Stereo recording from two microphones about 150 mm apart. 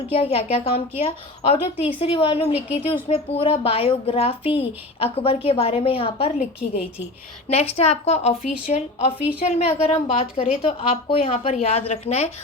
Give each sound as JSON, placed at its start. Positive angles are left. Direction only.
{"t": 0.1, "sound": "a woman's voice", "side_deg": 40}